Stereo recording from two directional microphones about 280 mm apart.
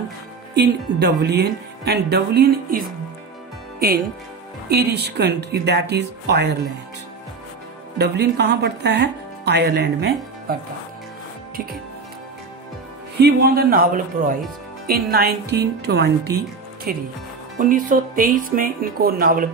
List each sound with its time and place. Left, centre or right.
0.6 s speech: right
4.6 s speech: right
8.0 s speech: right
13.2 s speech: right